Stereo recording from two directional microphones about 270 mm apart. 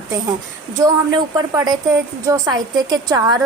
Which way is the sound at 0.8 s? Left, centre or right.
Centre.